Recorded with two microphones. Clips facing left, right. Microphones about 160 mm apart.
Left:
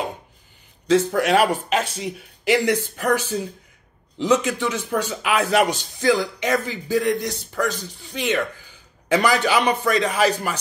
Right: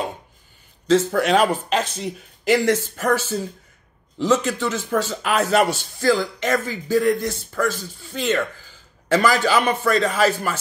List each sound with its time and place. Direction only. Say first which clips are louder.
0.8 s speech: even; 10° left (ahead or behind)
6.5 s a man's voice: even; 45° right (ahead or behind)
7.5 s speech: even; 15° left (ahead or behind)